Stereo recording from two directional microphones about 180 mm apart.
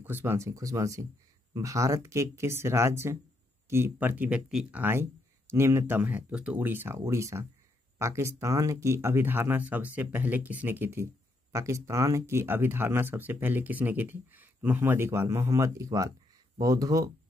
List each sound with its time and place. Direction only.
0.0 s speech: 15° right (ahead or behind)